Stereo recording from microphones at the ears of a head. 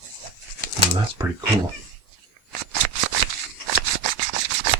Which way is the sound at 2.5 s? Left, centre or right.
Right.